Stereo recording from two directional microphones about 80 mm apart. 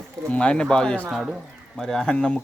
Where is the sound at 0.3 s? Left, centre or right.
Centre.